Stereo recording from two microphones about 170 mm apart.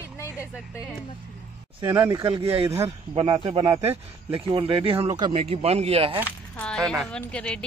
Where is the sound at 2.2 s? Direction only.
35° right (ahead or behind).